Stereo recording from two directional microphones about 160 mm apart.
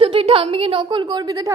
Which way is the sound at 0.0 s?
35° right (ahead or behind).